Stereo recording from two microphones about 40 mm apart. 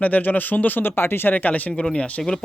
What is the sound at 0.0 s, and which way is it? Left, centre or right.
Speech, left.